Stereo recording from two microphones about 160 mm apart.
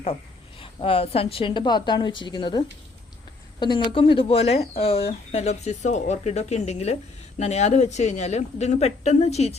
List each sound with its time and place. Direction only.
0.6 s a woman's voice: 35° left (ahead or behind)